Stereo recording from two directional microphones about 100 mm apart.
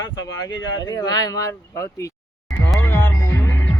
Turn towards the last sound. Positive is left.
turn(degrees=25)  # may be behind; listen again after turning